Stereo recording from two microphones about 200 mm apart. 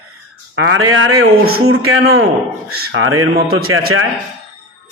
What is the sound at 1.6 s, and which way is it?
Speech, 90° right.